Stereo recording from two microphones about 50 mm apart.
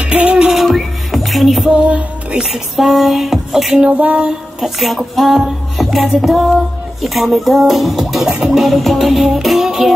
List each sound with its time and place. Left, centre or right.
0.0 s music: centre
0.7 s music: centre
1.7 s music: right
3.9 s a sound: right
4.3 s speech: centre